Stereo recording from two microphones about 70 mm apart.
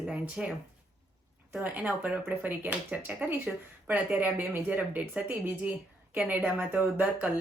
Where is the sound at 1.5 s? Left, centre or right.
Right.